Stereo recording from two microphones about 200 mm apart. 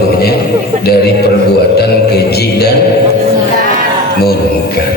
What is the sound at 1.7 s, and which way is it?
Music, 55° left (ahead or behind).